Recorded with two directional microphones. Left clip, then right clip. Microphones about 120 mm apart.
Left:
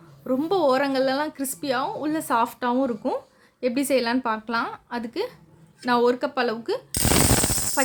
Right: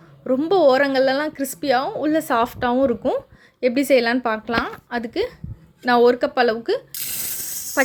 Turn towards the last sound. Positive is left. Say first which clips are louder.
# right 2 dB
turn(degrees=-20)  # may be behind; listen again after turning